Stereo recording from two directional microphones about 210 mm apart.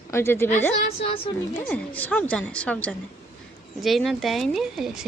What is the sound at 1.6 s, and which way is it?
A woman's voice, 5° left (ahead or behind).